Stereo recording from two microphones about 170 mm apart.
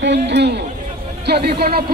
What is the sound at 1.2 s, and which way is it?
Speech, 70° right (ahead or behind).